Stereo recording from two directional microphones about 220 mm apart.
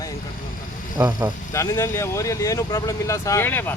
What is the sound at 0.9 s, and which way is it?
Speech, 15° right (ahead or behind).